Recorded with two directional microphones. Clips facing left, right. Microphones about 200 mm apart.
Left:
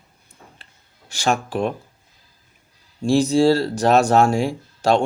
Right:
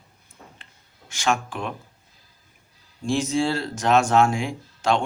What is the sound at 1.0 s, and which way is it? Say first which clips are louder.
Speech: left 3 dB; 35° left (ahead or behind).